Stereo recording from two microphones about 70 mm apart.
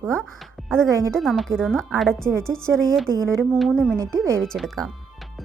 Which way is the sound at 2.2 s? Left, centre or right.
Right.